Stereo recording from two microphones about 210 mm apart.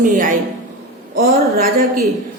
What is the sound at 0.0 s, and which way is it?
Speech, 40° right (ahead or behind).